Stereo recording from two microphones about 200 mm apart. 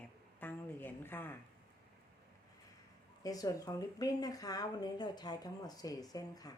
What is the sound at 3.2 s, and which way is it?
Speech, 20° left (ahead or behind).